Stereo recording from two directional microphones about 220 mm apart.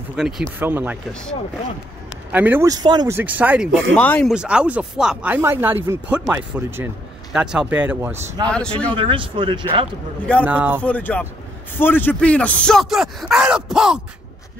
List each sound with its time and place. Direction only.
0.1 s speech: 5° right (ahead or behind)
2.3 s speech: 10° right (ahead or behind)
3.9 s speech: 5° left (ahead or behind); by 8.5 s 10° right (ahead or behind)
8.5 s speech: 5° left (ahead or behind)
8.9 s speech: 25° right (ahead or behind)
10.4 s speech: 10° right (ahead or behind)
10.8 s speech: 5° left (ahead or behind)